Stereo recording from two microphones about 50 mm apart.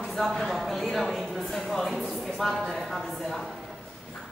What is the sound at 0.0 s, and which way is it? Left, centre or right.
Speech, centre.